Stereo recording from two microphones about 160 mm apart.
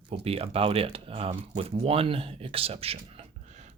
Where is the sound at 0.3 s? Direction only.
35° right (ahead or behind).